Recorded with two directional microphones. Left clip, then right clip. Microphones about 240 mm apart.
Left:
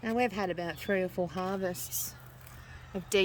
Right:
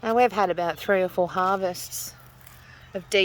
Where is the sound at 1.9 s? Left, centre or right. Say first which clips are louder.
Right 3 dB; centre.